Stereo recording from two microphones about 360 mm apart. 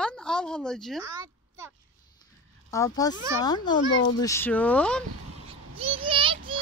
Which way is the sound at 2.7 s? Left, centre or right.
Centre.